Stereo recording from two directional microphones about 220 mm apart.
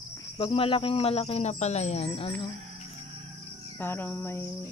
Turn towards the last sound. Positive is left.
turn(degrees=10)  # may be behind; listen again after turning